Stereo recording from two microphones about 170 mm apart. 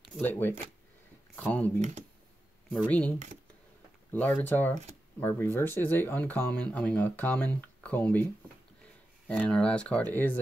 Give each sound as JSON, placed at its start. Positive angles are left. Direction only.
{"t": 0.2, "sound": "speech", "side_deg": 10}
{"t": 1.8, "sound": "speech", "side_deg": -45}
{"t": 2.9, "sound": "speech", "side_deg": 10}
{"t": 9.3, "sound": "speech", "side_deg": 5}